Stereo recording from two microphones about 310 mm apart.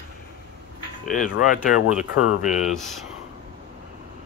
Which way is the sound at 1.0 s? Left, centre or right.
Left.